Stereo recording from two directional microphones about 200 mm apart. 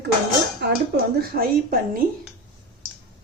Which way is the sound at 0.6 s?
55° right (ahead or behind).